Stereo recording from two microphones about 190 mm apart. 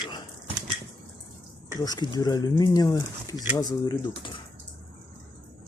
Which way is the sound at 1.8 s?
20° left (ahead or behind).